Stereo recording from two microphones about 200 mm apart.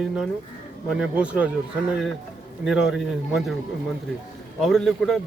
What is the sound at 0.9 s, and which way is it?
Speech, 5° right (ahead or behind).